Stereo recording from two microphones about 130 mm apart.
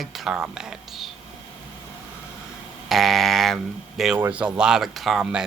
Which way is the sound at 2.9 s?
Centre (ahead or behind).